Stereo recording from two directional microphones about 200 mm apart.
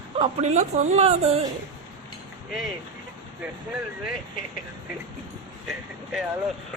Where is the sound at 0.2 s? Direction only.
30° right (ahead or behind).